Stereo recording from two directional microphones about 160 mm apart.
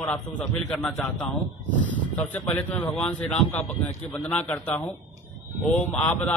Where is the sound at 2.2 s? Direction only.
10° left (ahead or behind).